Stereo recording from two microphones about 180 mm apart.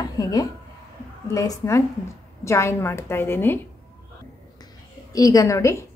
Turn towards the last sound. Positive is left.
turn(degrees=15)  # may be behind; listen again after turning